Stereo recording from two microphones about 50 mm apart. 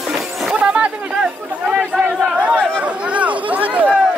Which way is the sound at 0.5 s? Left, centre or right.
Right.